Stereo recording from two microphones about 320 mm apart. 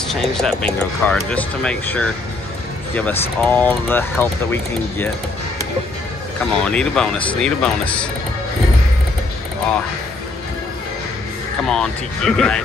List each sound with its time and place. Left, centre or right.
0.1 s speech: centre
6.4 s speech: centre
11.7 s speech: centre